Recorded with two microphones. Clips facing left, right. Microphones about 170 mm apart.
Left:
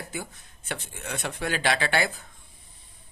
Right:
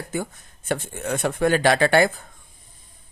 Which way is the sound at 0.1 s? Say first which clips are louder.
Right 8 dB; 50° right (ahead or behind).